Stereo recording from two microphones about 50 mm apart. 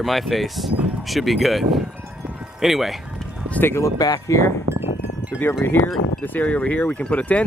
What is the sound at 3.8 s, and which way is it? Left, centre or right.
Speech, left.